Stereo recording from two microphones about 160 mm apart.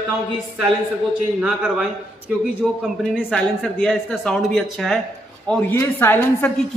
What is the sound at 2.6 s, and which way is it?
A woman's voice, centre (ahead or behind).